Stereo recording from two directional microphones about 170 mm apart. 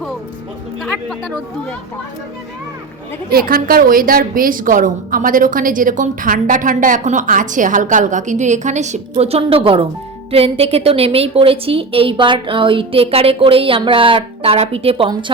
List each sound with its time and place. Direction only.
0.8 s speech: centre (ahead or behind)
3.3 s a woman's voice: 60° right (ahead or behind); by 15.2 s 30° right (ahead or behind)